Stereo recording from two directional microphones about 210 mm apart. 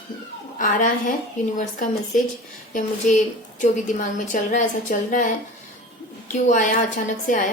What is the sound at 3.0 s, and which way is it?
A woman's voice, 40° left (ahead or behind).